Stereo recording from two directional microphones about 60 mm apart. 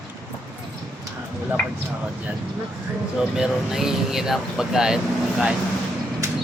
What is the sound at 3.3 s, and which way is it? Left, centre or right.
Speech, centre.